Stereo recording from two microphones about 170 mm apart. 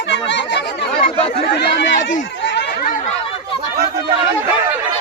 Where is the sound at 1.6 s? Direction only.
90° left.